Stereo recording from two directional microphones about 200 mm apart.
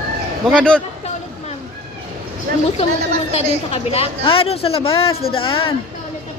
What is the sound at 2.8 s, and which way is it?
A woman's voice, 30° left (ahead or behind).